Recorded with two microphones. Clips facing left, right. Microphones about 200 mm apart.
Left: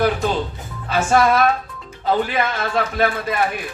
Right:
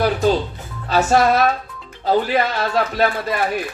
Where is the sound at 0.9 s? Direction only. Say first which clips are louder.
Right 1 dB; 35° right (ahead or behind).